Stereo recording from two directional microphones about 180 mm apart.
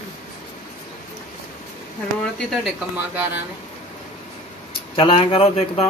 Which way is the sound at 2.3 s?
Centre (ahead or behind).